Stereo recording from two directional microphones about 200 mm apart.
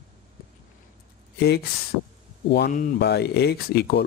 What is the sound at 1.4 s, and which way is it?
Speech, 55° left (ahead or behind).